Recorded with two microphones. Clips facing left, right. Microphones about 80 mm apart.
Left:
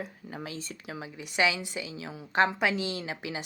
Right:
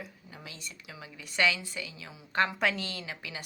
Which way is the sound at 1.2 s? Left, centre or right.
Centre.